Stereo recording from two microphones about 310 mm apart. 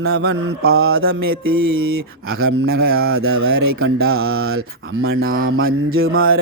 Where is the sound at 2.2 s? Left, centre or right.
Right.